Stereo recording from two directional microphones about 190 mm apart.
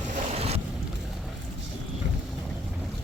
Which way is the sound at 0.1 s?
35° right (ahead or behind).